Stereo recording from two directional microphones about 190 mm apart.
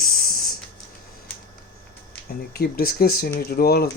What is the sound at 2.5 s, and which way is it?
Speech, 50° left (ahead or behind).